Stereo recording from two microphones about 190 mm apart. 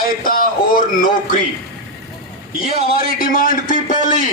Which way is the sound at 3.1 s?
45° left (ahead or behind).